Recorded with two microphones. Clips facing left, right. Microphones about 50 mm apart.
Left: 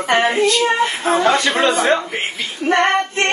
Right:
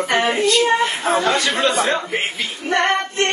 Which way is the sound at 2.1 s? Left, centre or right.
Centre.